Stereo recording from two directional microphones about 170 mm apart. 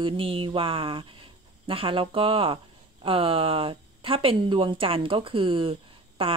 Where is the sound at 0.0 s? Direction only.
30° right (ahead or behind).